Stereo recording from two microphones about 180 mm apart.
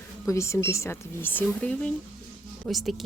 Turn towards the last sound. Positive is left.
turn(degrees=0)  # may be behind; listen again after turning